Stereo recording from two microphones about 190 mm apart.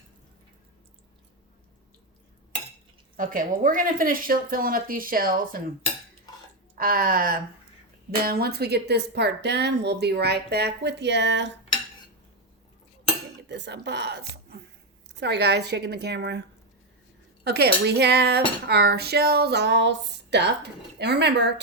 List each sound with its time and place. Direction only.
3.2 s speech: 45° right (ahead or behind)
6.7 s speech: 50° right (ahead or behind)
8.2 s dishes: 55° right (ahead or behind)
13.5 s dishes: 65° right (ahead or behind)
17.5 s dishes: 60° right (ahead or behind)